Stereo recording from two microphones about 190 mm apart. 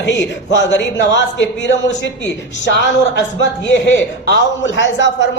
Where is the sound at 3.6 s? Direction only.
75° left (ahead or behind).